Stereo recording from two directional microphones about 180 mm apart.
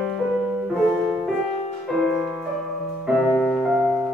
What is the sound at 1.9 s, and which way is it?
Music, centre (ahead or behind).